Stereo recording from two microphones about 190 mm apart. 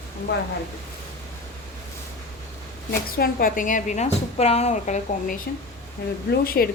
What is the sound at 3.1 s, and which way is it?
A woman's voice, 50° left (ahead or behind).